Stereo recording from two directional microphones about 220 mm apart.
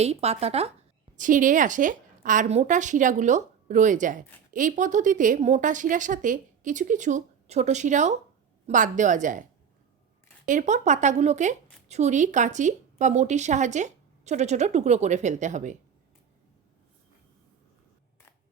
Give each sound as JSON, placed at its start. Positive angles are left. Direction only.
{"t": 0.0, "sound": "a woman's voice", "side_deg": -30}
{"t": 10.4, "sound": "a woman's voice", "side_deg": -35}